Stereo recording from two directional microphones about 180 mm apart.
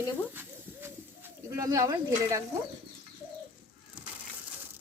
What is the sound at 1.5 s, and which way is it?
Speech, 20° right (ahead or behind).